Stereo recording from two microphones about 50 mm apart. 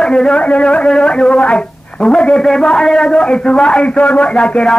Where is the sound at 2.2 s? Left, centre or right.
Centre.